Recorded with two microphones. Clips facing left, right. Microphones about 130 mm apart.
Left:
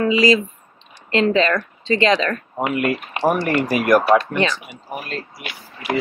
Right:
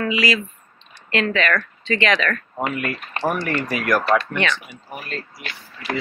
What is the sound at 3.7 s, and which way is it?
Speech, 25° left (ahead or behind).